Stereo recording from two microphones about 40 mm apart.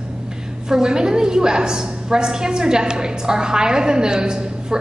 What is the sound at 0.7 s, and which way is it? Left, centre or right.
A woman's voice, centre.